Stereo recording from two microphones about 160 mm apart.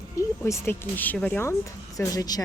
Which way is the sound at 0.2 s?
20° left (ahead or behind).